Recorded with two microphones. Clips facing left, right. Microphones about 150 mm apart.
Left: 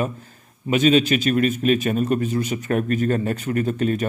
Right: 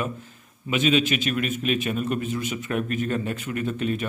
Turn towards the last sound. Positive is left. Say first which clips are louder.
# left 5 dB
turn(degrees=40)  # may be behind; listen again after turning